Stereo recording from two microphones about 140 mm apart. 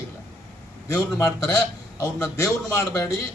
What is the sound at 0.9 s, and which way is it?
A man's voice, 25° left (ahead or behind).